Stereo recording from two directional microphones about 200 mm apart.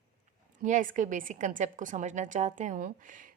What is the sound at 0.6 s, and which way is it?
A woman's voice, 40° right (ahead or behind).